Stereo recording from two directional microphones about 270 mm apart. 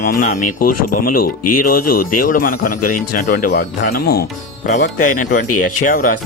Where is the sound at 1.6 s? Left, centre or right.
Left.